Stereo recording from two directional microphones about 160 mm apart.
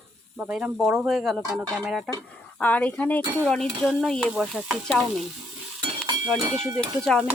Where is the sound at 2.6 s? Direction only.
10° left (ahead or behind).